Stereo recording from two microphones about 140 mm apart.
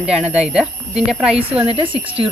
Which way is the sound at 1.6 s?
40° right (ahead or behind).